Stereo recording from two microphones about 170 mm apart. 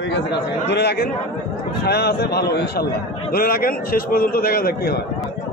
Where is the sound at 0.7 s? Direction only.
75° left (ahead or behind).